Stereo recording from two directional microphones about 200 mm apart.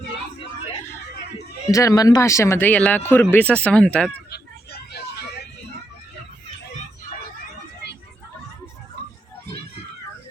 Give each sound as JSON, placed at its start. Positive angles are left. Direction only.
{"t": 1.7, "sound": "speech", "side_deg": 15}
{"t": 4.3, "sound": "vehicle", "side_deg": 55}